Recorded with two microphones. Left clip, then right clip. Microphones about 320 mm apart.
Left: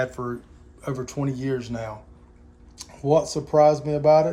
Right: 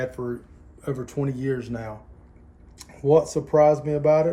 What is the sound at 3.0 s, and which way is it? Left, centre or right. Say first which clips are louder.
Speech: right 2 dB; centre.